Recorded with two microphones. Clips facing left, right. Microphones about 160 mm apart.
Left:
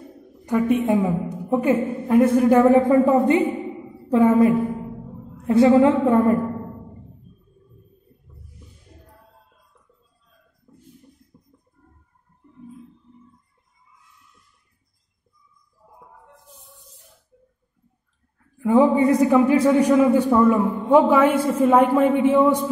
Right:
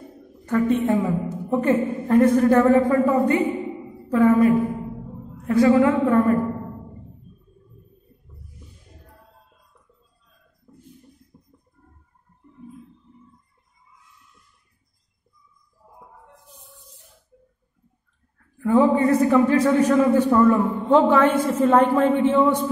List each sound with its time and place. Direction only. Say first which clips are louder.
0.5 s a man's voice: left 1 dB; 15° left (ahead or behind)
18.6 s a man's voice: left 1 dB; 15° left (ahead or behind)